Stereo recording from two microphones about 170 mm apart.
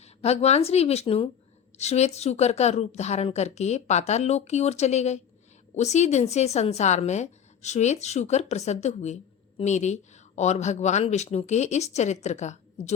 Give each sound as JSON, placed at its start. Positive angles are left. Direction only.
{"t": 0.0, "sound": "speech", "side_deg": 40}